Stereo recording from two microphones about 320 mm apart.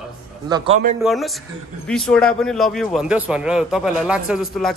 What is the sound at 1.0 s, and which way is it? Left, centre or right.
A man's voice, centre.